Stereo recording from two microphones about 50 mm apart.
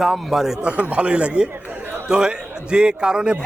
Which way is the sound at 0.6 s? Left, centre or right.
Right.